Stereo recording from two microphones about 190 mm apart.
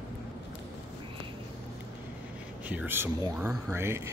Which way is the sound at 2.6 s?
10° right (ahead or behind).